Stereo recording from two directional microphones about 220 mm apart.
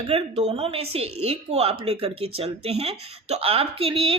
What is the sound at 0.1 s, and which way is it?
Speech, 25° right (ahead or behind).